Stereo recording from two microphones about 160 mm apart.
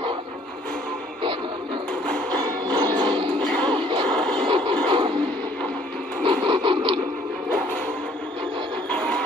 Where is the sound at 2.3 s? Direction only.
25° right (ahead or behind).